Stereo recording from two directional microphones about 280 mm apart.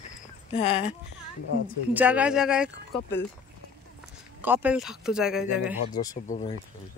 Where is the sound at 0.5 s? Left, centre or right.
Left.